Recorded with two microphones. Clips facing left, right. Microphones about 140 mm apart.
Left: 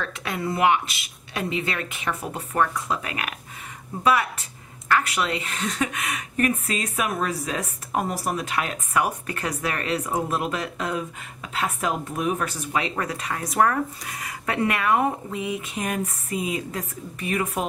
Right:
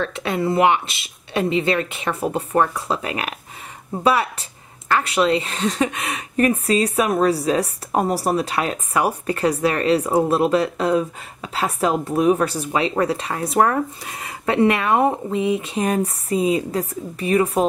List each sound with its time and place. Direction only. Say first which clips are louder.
0.0 s a woman's voice: right 7 dB; 25° right (ahead or behind)